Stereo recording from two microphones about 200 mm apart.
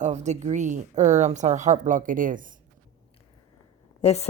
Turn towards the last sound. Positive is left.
turn(degrees=30)  # may be behind; listen again after turning